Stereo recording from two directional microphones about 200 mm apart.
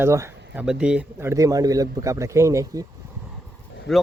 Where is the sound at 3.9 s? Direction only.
Centre (ahead or behind).